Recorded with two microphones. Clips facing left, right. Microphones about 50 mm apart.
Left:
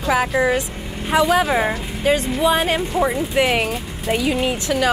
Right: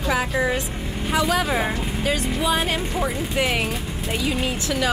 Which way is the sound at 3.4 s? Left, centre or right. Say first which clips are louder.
Left 4 dB; centre.